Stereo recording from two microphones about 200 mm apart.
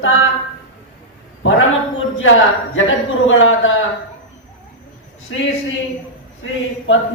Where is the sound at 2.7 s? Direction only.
75° left (ahead or behind).